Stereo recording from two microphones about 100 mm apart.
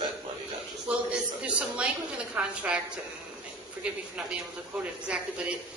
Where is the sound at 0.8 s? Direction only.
10° right (ahead or behind).